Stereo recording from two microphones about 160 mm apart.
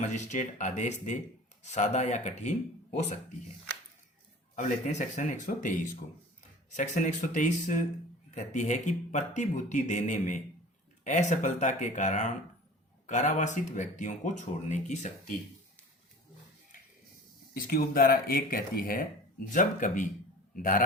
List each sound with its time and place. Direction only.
0.0 s speech: 50° left (ahead or behind)
4.5 s speech: 50° left (ahead or behind)
17.5 s speech: 65° left (ahead or behind)
19.5 s speech: 55° left (ahead or behind)